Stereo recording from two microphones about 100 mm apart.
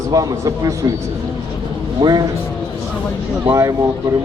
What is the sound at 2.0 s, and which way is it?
Speech, 45° right (ahead or behind).